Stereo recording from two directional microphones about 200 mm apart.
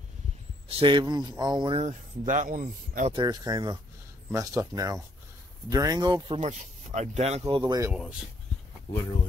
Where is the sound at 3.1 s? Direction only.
20° right (ahead or behind).